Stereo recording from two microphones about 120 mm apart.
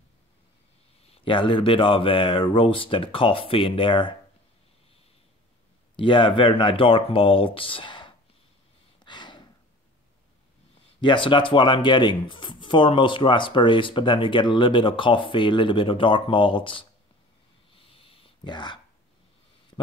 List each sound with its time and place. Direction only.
1.0 s speech: 50° left (ahead or behind)
5.9 s speech: 45° left (ahead or behind)
9.0 s gasp: 40° left (ahead or behind)
11.0 s speech: 45° left (ahead or behind)
17.8 s a sound: 50° left (ahead or behind)